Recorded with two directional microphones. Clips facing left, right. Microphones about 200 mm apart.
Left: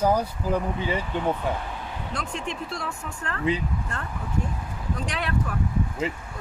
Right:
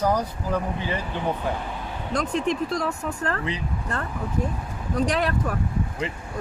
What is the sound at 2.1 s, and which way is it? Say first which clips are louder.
Speech: right 10 dB; 40° right (ahead or behind).